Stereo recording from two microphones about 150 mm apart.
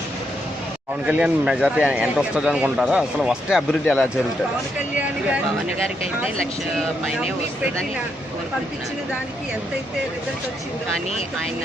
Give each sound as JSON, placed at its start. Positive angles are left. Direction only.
{"t": 1.0, "sound": "a man's voice", "side_deg": -5}
{"t": 3.7, "sound": "speech", "side_deg": 10}
{"t": 6.4, "sound": "speech", "side_deg": 0}